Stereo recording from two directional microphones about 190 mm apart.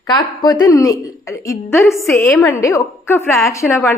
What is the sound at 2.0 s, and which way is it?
Speech, 5° left (ahead or behind).